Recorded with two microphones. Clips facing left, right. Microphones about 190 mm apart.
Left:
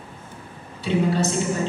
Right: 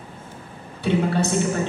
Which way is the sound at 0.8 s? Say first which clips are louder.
Even; 60° right (ahead or behind).